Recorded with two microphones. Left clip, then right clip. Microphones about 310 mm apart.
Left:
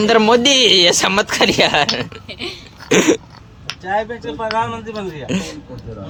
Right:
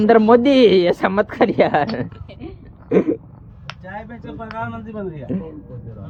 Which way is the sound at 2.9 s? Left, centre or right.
Centre.